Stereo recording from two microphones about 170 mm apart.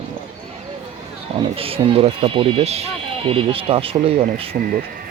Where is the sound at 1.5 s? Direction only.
35° right (ahead or behind).